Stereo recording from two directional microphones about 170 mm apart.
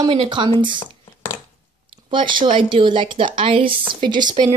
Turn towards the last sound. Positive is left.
turn(degrees=-25)  # may be behind; listen again after turning